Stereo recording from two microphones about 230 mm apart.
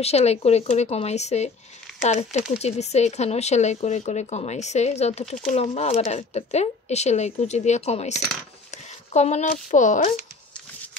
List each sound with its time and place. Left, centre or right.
0.0 s speech: left